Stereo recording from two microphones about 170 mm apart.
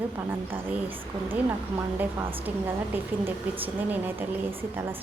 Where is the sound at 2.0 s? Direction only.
15° right (ahead or behind).